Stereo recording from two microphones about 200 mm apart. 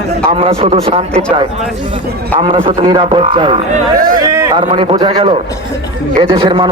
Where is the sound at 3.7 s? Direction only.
40° right (ahead or behind).